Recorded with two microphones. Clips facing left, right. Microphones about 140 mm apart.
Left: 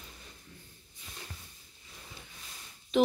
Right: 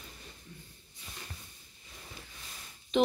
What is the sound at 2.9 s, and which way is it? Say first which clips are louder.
Speech: left 1 dB; 5° left (ahead or behind).